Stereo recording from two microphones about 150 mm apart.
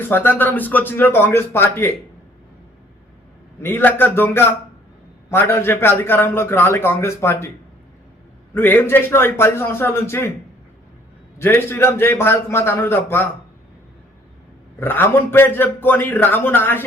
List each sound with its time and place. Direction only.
0.1 s a man's voice: 15° left (ahead or behind)
3.6 s a man's voice: 15° left (ahead or behind)
8.5 s a man's voice: 15° left (ahead or behind)
11.3 s a man's voice: 15° left (ahead or behind)
14.8 s a man's voice: 15° left (ahead or behind)